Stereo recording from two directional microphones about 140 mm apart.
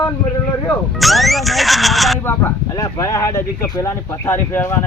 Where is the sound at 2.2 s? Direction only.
15° left (ahead or behind).